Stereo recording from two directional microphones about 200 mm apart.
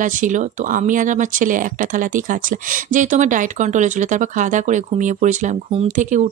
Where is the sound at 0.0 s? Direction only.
40° right (ahead or behind).